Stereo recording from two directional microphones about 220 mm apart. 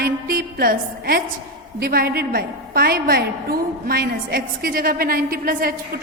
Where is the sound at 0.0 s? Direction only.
40° right (ahead or behind).